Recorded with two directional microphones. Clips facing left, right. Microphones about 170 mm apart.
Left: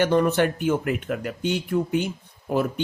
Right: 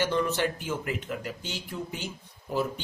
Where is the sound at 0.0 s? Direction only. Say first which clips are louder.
Left 7 dB; 55° left (ahead or behind).